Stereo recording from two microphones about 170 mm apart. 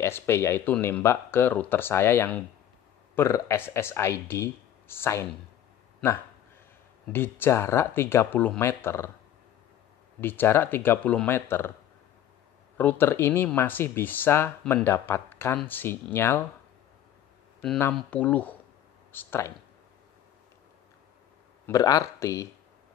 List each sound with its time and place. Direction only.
0.0 s speech: 15° left (ahead or behind)
7.1 s speech: 10° left (ahead or behind)
10.2 s speech: 10° left (ahead or behind)
12.7 s speech: 10° left (ahead or behind)
17.6 s speech: 10° left (ahead or behind)
21.6 s speech: 20° left (ahead or behind)